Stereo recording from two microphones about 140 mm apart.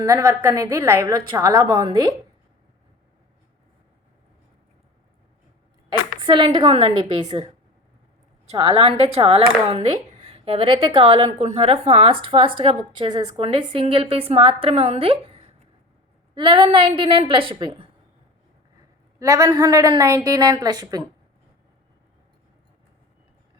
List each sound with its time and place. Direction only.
0.0 s a woman's voice: 20° right (ahead or behind)
6.1 s a woman's voice: 35° right (ahead or behind)
8.4 s a woman's voice: 40° right (ahead or behind)
16.3 s a woman's voice: 35° right (ahead or behind)
19.2 s a woman's voice: 25° right (ahead or behind)